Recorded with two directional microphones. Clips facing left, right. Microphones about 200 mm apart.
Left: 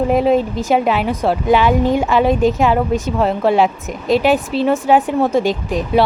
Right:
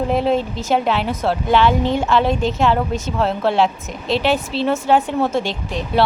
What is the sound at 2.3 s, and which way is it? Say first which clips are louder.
Speech: left 6 dB; 35° left (ahead or behind).